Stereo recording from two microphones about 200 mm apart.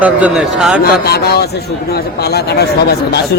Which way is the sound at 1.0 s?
50° left (ahead or behind).